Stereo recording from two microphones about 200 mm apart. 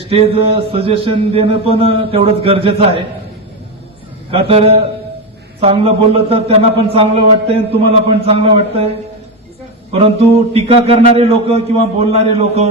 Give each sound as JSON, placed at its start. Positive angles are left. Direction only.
{"t": 0.1, "sound": "a man's voice", "side_deg": -30}
{"t": 4.3, "sound": "a man's voice", "side_deg": -30}
{"t": 9.9, "sound": "a man's voice", "side_deg": -30}